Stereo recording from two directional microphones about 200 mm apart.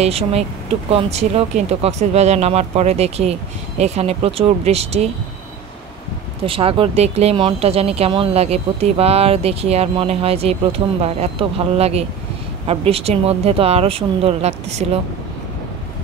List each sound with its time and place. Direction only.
0.0 s speech: 30° right (ahead or behind)
6.4 s speech: 25° right (ahead or behind)